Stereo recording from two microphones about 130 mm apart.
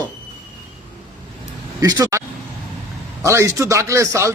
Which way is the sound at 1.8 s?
25° right (ahead or behind).